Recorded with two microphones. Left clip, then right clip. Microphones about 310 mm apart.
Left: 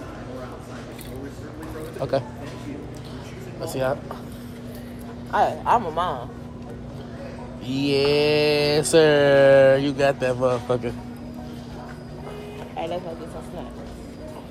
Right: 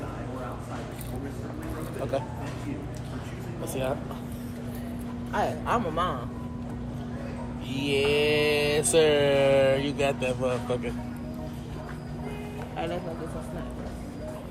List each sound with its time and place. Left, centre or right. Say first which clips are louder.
3.6 s mantra: left 6 dB; left
5.3 s speech: left 8 dB; centre
7.8 s mantra: left 5 dB; left
12.7 s music: left 4 dB; centre